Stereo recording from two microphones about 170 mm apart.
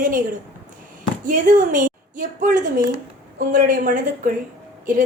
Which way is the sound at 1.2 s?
50° right (ahead or behind).